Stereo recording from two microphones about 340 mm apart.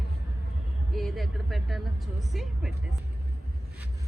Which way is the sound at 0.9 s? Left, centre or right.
Centre.